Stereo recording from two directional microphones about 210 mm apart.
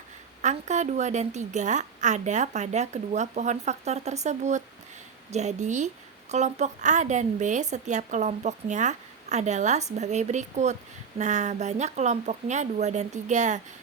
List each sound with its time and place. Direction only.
0.4 s a woman's voice: 35° right (ahead or behind)